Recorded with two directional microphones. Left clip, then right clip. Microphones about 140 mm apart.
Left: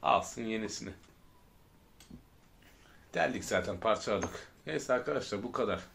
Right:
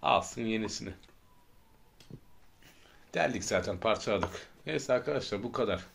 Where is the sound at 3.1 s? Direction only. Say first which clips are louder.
Right 1 dB; 45° right (ahead or behind).